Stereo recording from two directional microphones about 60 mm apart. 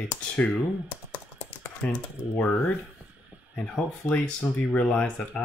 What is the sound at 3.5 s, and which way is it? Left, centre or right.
Speech, left.